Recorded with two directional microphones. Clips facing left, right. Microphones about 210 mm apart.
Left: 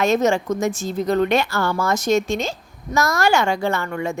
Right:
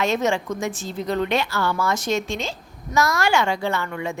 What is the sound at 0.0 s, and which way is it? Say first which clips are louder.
A woman's voice: left 4 dB; 45° left (ahead or behind).